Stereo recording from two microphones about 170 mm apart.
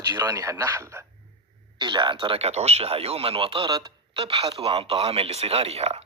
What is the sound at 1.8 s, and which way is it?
Speech, 25° right (ahead or behind).